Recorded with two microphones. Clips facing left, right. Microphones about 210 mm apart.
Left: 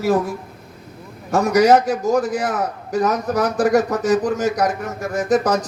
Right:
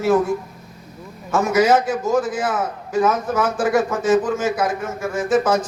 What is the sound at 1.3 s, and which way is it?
A man's voice, 40° left (ahead or behind).